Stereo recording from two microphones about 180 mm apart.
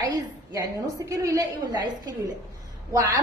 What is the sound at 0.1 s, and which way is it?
A woman's voice, 20° right (ahead or behind).